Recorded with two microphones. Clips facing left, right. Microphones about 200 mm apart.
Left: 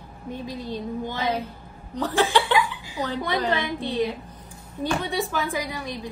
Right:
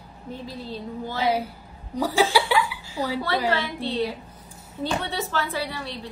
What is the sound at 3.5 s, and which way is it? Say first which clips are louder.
A woman's voice: even; 15° left (ahead or behind).